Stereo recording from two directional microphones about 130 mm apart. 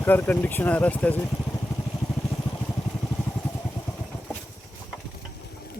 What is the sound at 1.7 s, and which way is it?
Vehicle, 25° left (ahead or behind).